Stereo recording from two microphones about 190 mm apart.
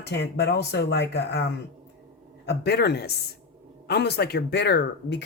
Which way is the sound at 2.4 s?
60° left (ahead or behind).